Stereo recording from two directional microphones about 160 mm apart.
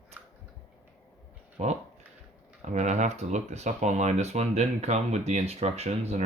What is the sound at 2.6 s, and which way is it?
Speech, 45° right (ahead or behind).